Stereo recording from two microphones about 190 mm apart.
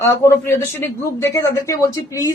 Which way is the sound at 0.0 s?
15° left (ahead or behind).